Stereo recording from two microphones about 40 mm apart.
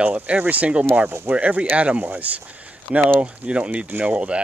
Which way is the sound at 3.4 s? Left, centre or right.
Right.